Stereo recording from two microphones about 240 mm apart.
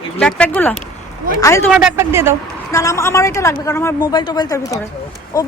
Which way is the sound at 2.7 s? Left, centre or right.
Centre.